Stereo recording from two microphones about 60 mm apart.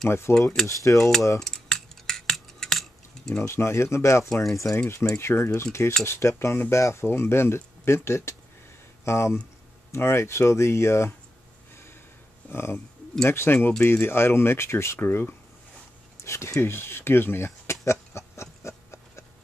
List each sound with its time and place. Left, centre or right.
0.3 s speech: centre
1.4 s a sound: centre
3.4 s speech: left
4.3 s speech: centre
5.1 s speech: left
12.4 s speech: left
15.0 s speech: left
16.3 s speech: left
16.7 s speech: left
17.8 s a sound: left